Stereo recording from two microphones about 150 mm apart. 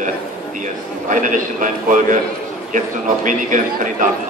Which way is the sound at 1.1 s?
60° right (ahead or behind).